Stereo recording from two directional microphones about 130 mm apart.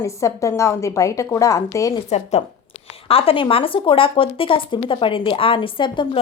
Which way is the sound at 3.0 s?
45° left (ahead or behind).